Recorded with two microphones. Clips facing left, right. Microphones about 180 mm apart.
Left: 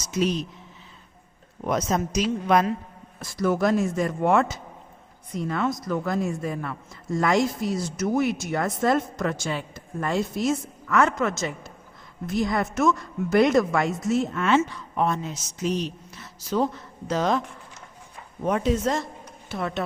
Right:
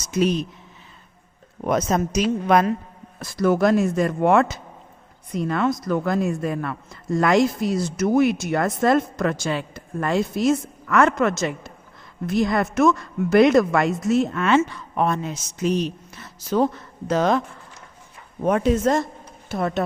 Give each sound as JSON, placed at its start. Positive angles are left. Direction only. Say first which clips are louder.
{"t": 0.1, "sound": "a woman's voice", "louder": "right 4 dB", "side_deg": -55}
{"t": 1.6, "sound": "a woman's voice", "louder": "right 3 dB", "side_deg": -55}
{"t": 3.2, "sound": "a woman's voice", "louder": "right 4 dB", "side_deg": -70}
{"t": 18.4, "sound": "a woman's voice", "louder": "right 4 dB", "side_deg": -55}